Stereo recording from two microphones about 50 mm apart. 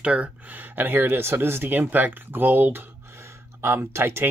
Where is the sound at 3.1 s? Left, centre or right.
Right.